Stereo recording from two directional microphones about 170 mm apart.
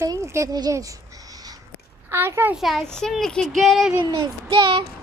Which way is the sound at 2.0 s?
15° right (ahead or behind).